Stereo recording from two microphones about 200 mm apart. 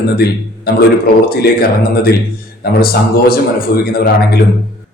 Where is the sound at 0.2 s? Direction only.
50° left (ahead or behind).